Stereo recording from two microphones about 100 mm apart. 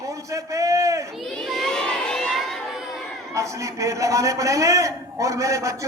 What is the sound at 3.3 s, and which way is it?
A man's voice, 30° right (ahead or behind).